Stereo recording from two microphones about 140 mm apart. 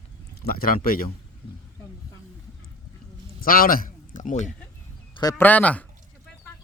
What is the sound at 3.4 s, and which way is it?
A man's voice, 90° left.